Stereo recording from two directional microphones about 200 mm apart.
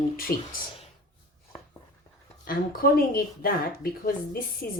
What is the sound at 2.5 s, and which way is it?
Speech, 50° left (ahead or behind).